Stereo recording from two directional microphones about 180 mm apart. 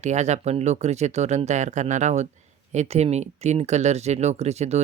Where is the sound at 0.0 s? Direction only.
40° right (ahead or behind).